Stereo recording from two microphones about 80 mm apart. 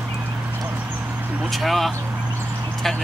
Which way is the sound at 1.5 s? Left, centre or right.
Centre.